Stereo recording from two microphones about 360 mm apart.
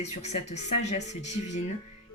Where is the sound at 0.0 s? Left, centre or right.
Centre.